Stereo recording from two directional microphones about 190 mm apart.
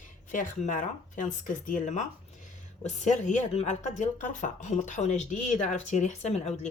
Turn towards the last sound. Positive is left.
turn(degrees=35)  # may be behind; listen again after turning